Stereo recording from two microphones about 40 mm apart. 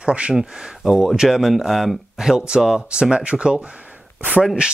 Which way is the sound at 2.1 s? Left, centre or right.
Centre.